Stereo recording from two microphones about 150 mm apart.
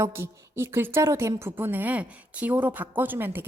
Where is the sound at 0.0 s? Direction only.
15° right (ahead or behind).